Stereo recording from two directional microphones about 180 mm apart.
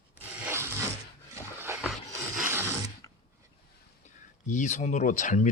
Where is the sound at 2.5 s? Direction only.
15° right (ahead or behind).